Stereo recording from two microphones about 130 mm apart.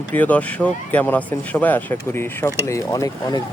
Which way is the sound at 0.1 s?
10° left (ahead or behind).